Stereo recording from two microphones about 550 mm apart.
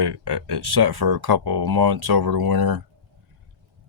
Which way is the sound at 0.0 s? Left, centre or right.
Right.